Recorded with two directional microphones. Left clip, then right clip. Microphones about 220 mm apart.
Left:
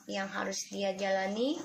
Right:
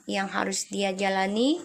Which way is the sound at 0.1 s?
40° right (ahead or behind).